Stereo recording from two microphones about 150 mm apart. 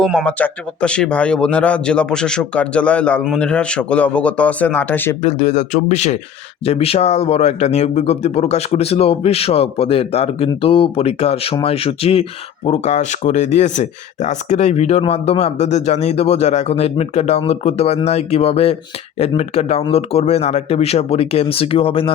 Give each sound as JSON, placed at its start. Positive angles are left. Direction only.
{"t": 0.3, "sound": "speech", "side_deg": 10}
{"t": 5.2, "sound": "speech", "side_deg": 50}